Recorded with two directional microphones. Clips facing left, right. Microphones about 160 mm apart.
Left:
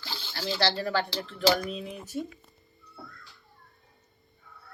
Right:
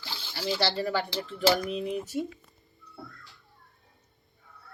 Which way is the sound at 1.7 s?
20° right (ahead or behind).